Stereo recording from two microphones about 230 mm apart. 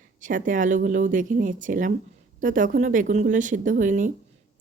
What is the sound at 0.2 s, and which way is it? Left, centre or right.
Speech, right.